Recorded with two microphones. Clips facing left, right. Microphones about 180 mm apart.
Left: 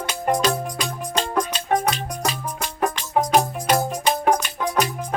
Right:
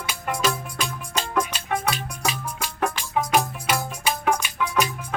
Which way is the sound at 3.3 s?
35° left (ahead or behind).